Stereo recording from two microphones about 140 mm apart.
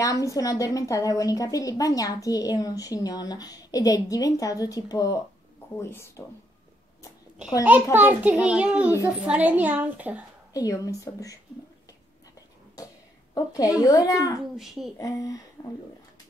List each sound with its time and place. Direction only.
0.0 s a woman's voice: 25° left (ahead or behind)
7.9 s a child's voice: 10° right (ahead or behind)
10.5 s a woman's voice: 25° left (ahead or behind)
12.7 s a sound: 25° left (ahead or behind)
13.7 s a woman's voice: 25° left (ahead or behind)
14.6 s speech: centre (ahead or behind)
15.0 s a woman's voice: 25° left (ahead or behind)